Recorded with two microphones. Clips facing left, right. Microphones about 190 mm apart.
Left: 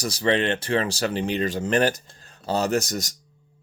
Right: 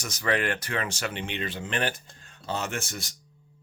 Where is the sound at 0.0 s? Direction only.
30° left (ahead or behind).